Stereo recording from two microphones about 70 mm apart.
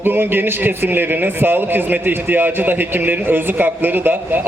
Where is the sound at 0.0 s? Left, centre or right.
Right.